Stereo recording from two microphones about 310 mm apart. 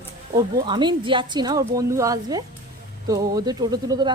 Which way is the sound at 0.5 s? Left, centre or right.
Centre.